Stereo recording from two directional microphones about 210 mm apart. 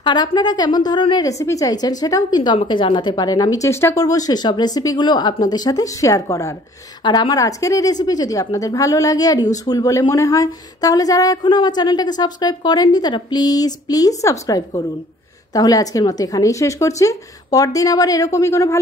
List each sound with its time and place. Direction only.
0.0 s a woman's voice: 20° left (ahead or behind)